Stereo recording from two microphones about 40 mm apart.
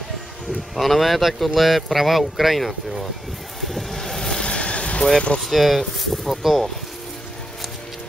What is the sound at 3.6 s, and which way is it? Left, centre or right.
Vehicle, centre.